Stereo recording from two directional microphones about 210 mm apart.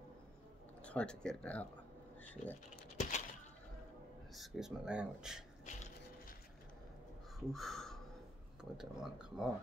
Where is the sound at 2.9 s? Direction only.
40° left (ahead or behind).